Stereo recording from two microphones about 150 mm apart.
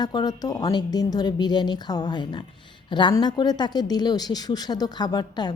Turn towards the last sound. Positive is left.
turn(degrees=30)  # may be behind; listen again after turning